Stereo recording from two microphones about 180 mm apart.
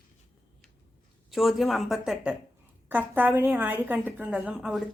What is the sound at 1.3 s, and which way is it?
A woman's voice, centre (ahead or behind).